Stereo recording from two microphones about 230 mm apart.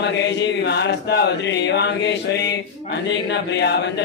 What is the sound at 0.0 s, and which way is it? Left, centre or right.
Mantra, left.